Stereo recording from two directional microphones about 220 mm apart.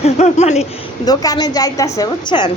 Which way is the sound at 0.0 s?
30° left (ahead or behind).